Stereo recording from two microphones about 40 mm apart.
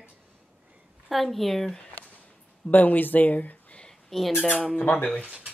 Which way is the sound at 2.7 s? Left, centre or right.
Left.